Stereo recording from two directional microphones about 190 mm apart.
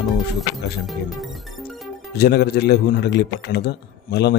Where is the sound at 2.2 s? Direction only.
55° left (ahead or behind).